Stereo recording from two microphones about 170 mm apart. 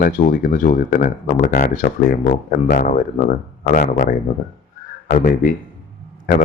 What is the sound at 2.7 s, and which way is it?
Speech, 50° left (ahead or behind).